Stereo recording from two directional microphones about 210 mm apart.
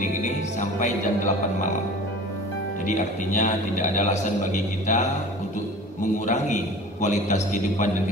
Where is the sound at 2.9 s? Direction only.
35° left (ahead or behind).